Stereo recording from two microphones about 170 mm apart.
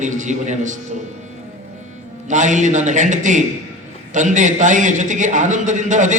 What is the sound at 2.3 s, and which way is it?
A man's voice, 45° right (ahead or behind).